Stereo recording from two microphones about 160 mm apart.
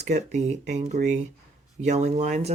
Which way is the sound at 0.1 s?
45° right (ahead or behind).